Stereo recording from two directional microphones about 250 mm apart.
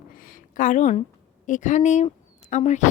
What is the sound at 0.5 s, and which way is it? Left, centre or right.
A woman's voice, left.